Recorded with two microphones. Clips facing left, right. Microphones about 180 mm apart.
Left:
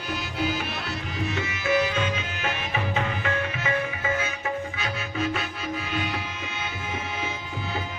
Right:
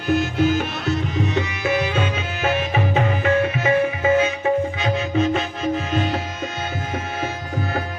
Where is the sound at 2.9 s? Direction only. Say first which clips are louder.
Right 7 dB; 55° right (ahead or behind).